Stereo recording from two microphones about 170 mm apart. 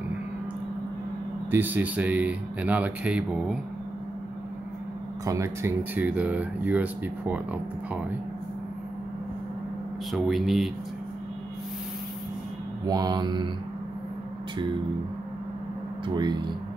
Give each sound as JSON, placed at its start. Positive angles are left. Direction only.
{"t": 1.5, "sound": "speech", "side_deg": -10}
{"t": 5.2, "sound": "speech", "side_deg": -20}
{"t": 10.1, "sound": "speech", "side_deg": 0}
{"t": 12.8, "sound": "mantra", "side_deg": -20}
{"t": 16.2, "sound": "mantra", "side_deg": -25}